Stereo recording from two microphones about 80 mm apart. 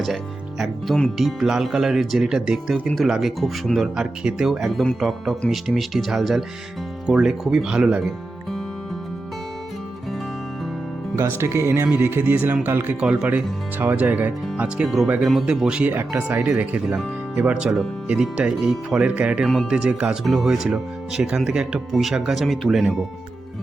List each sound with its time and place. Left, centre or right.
0.6 s speech: centre
11.1 s speech: right
13.0 s speech: centre
14.8 s speech: centre
15.4 s speech: centre
15.9 s speech: right; by 23.0 s centre